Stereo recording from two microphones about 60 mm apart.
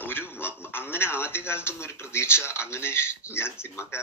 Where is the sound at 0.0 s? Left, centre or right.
Left.